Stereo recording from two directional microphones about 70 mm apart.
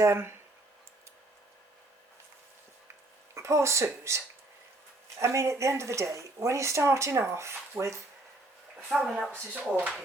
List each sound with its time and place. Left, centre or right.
0.0 s speech: right
3.3 s speech: right
8.9 s speech: centre
9.3 s speech: right